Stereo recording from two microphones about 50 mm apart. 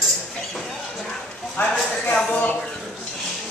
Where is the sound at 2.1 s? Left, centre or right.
Left.